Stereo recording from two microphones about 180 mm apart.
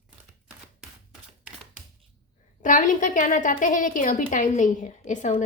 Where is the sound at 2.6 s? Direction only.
45° left (ahead or behind).